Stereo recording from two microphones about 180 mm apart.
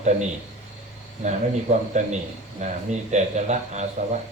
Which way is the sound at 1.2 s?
40° right (ahead or behind).